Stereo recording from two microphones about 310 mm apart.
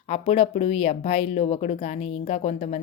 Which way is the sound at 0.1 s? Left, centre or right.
Left.